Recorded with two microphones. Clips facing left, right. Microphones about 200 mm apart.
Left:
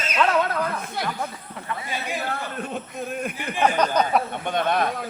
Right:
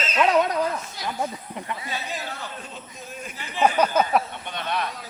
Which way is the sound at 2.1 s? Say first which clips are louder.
Left 5 dB; 55° left (ahead or behind).